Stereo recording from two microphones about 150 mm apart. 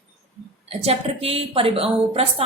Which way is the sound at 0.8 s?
40° right (ahead or behind).